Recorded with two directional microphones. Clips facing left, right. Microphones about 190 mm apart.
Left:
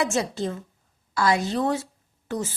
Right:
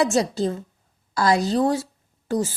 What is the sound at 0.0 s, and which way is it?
A woman's voice, 35° right (ahead or behind).